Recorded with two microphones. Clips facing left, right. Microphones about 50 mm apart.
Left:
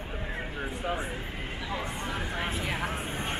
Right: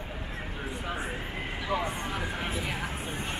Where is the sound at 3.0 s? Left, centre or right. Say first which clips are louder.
Left 1 dB; left.